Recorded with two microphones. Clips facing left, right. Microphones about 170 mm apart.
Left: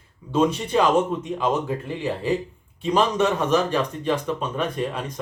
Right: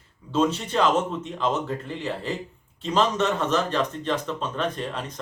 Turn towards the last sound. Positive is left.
turn(degrees=10)  # may be behind; listen again after turning